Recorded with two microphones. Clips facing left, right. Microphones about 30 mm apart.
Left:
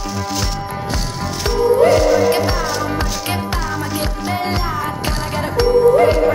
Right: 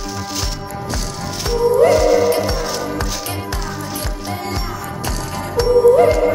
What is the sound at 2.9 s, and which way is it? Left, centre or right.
Music, left.